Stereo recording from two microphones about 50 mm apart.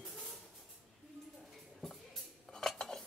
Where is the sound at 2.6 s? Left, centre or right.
Centre.